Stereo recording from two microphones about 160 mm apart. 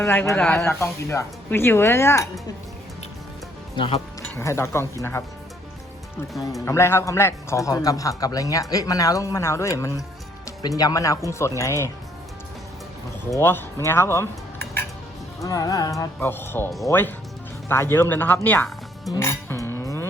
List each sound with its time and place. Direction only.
0.0 s speech: 15° left (ahead or behind)
3.8 s speech: 35° left (ahead or behind)
4.4 s speech: 15° left (ahead or behind)
6.4 s speech: 20° left (ahead or behind)
13.3 s speech: 15° left (ahead or behind)
15.4 s speech: 20° left (ahead or behind)
19.1 s music: 15° left (ahead or behind)